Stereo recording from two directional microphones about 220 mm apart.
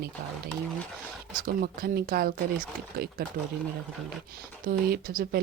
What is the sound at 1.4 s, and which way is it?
Speech, 40° right (ahead or behind).